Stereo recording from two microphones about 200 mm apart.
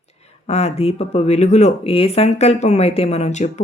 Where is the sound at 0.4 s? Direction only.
30° left (ahead or behind).